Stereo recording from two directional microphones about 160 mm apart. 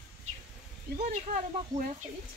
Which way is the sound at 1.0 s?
50° right (ahead or behind).